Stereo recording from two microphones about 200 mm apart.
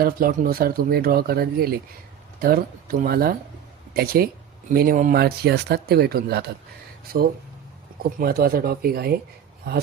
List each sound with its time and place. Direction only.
0.0 s speech: 45° right (ahead or behind)